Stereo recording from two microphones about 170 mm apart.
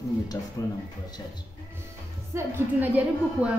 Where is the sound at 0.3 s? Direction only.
25° left (ahead or behind).